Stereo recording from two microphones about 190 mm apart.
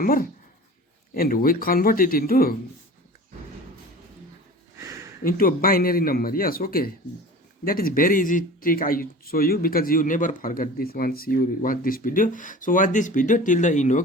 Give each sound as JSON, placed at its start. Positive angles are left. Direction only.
{"t": 0.0, "sound": "speech", "side_deg": 50}
{"t": 4.8, "sound": "a sound", "side_deg": -15}
{"t": 5.2, "sound": "speech", "side_deg": 50}